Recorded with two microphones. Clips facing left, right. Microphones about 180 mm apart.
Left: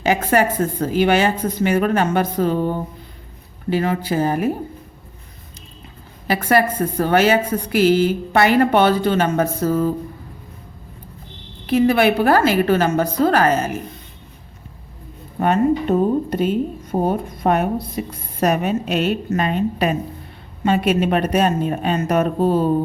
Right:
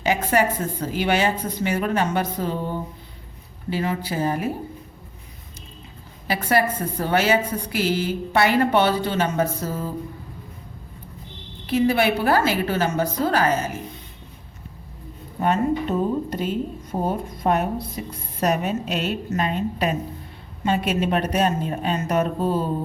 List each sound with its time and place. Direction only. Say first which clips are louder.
0.0 s a woman's voice: left 3 dB; 50° left (ahead or behind)
6.2 s a woman's voice: left 4 dB; 55° left (ahead or behind)
11.6 s a woman's voice: left 4 dB; 55° left (ahead or behind)
15.4 s a woman's voice: left 4 dB; 60° left (ahead or behind)